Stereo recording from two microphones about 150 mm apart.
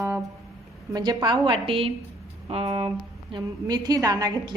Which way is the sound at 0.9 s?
30° right (ahead or behind).